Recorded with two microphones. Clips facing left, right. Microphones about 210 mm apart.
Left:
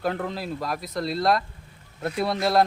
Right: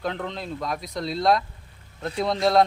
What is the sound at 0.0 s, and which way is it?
Speech, 5° left (ahead or behind).